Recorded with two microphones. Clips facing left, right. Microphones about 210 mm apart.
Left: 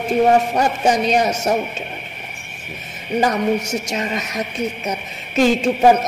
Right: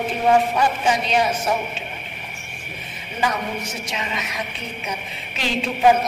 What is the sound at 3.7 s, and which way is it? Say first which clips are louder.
A man's voice: left 7 dB; 45° left (ahead or behind).